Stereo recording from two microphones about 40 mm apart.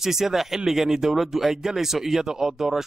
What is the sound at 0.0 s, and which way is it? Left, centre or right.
Speech, centre.